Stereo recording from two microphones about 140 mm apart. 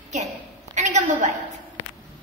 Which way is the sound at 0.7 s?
55° right (ahead or behind).